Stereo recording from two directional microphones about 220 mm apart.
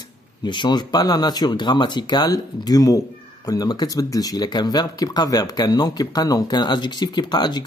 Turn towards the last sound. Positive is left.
turn(degrees=20)  # may be behind; listen again after turning